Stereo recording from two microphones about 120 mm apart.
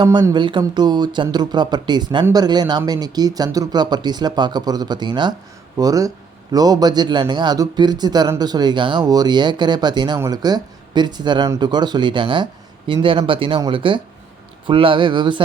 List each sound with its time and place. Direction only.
0.0 s speech: 40° right (ahead or behind)